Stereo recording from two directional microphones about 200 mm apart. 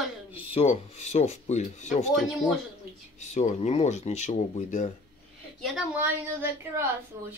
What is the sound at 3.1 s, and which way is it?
Speech, 35° left (ahead or behind).